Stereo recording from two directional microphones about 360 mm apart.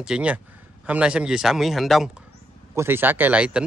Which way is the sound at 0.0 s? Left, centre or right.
Centre.